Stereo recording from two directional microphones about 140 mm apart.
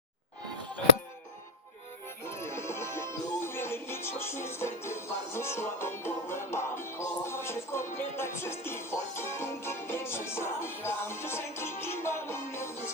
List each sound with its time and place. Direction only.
2.2 s music: 20° left (ahead or behind)